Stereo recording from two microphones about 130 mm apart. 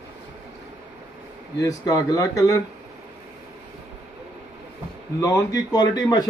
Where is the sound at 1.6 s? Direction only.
25° left (ahead or behind).